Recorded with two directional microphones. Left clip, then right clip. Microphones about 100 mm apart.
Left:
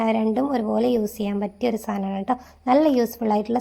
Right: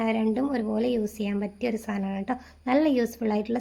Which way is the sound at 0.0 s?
20° left (ahead or behind).